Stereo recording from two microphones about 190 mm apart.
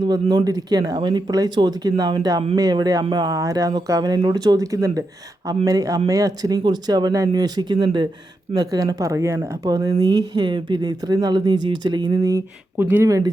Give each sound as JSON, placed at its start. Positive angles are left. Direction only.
{"t": 0.0, "sound": "speech", "side_deg": -25}